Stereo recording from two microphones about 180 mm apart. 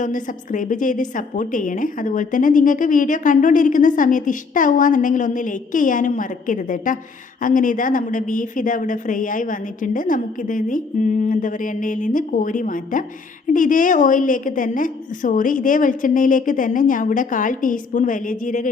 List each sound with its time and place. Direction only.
0.0 s a woman's voice: 45° left (ahead or behind)